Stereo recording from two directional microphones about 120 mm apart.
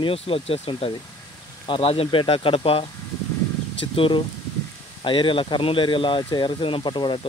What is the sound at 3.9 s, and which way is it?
Speech, 45° left (ahead or behind).